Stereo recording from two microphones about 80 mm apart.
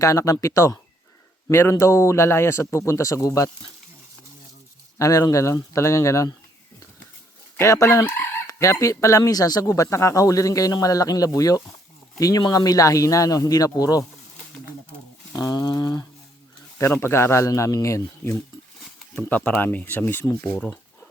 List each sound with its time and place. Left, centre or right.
0.0 s speech: left
4.9 s speech: left
7.6 s speech: left
15.3 s speech: left
16.7 s speech: left
19.1 s speech: centre